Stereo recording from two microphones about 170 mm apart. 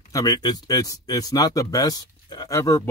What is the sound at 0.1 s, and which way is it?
Speech, 20° left (ahead or behind).